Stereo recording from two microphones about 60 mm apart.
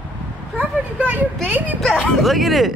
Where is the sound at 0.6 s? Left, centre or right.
Right.